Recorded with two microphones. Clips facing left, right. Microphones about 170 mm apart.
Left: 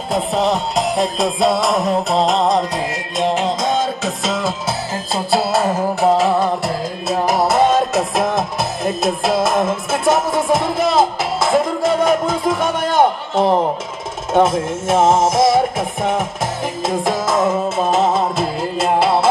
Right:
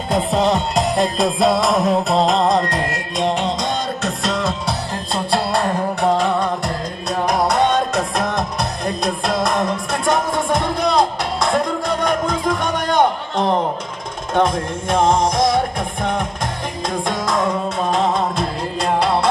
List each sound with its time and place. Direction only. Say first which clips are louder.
0.1 s music: even; centre (ahead or behind)